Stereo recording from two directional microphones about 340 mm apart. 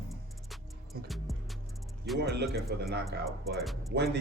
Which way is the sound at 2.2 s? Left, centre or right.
Right.